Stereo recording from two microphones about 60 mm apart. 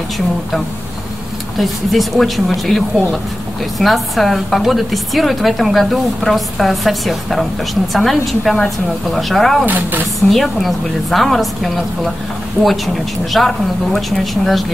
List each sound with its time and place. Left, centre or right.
1.6 s a woman's voice: centre
9.7 s speech: right
10.3 s a woman's voice: centre